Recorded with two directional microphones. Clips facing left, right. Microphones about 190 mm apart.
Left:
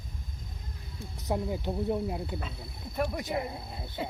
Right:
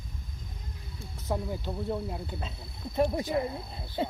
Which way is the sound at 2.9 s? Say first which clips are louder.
Right 4 dB; 25° right (ahead or behind).